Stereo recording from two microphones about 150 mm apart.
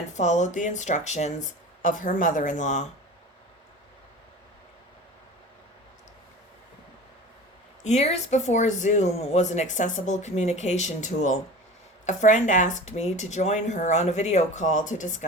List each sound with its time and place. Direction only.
0.1 s speech: 50° left (ahead or behind)
1.8 s speech: 60° left (ahead or behind)
7.9 s speech: 45° left (ahead or behind)